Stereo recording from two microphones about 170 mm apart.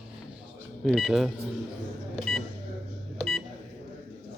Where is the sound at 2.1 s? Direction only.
Centre (ahead or behind).